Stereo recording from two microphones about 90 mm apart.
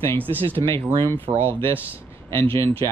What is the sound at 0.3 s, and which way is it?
Speech, 20° left (ahead or behind).